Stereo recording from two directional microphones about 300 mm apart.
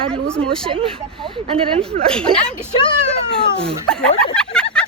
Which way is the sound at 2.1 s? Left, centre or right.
Centre.